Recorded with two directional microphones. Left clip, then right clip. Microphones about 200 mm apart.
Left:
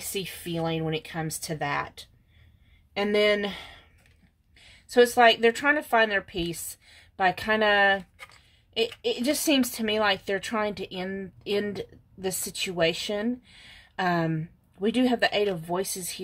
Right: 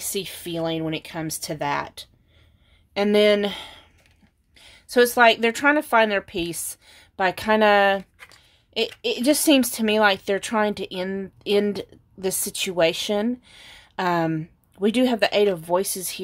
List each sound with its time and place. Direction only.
0.0 s speech: 40° right (ahead or behind)